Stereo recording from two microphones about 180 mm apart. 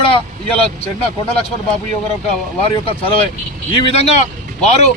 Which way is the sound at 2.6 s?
30° left (ahead or behind).